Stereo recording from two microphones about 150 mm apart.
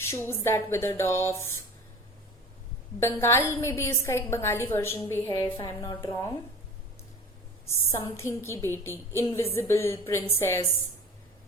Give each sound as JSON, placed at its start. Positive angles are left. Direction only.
{"t": 0.3, "sound": "a woman's voice", "side_deg": 15}
{"t": 3.0, "sound": "a woman's voice", "side_deg": 15}
{"t": 7.7, "sound": "a woman's voice", "side_deg": 20}